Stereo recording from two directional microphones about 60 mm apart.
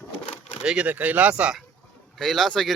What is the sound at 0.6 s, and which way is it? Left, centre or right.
Speech, centre.